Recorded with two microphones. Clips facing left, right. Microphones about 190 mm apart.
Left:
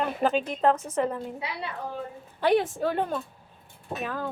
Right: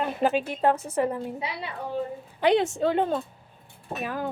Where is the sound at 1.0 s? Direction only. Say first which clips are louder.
Right 2 dB; 15° right (ahead or behind).